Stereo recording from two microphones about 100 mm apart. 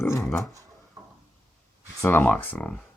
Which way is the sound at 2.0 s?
20° left (ahead or behind).